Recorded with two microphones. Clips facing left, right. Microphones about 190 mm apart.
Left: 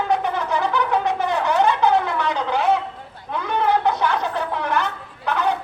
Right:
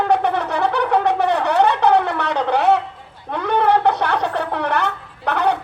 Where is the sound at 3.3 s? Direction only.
60° right (ahead or behind).